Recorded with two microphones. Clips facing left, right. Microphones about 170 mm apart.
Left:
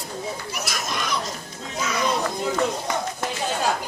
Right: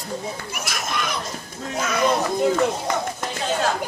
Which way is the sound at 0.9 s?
55° right (ahead or behind).